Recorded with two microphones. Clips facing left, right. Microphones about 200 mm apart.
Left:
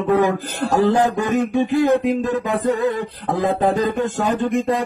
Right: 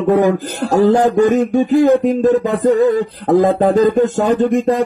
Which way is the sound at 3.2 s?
45° right (ahead or behind).